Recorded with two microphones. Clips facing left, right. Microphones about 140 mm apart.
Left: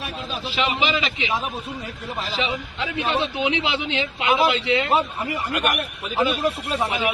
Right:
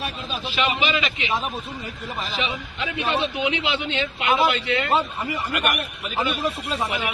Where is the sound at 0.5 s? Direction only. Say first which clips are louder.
Even; 30° left (ahead or behind).